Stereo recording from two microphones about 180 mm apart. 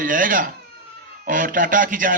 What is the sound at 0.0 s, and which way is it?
A man's voice, 50° right (ahead or behind).